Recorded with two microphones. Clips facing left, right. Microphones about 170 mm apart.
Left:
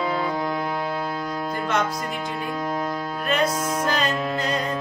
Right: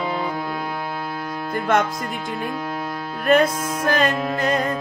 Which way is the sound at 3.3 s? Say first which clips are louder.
Right 6 dB; 55° right (ahead or behind).